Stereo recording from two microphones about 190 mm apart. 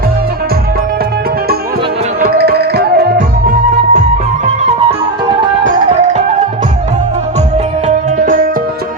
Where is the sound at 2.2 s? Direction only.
55° right (ahead or behind).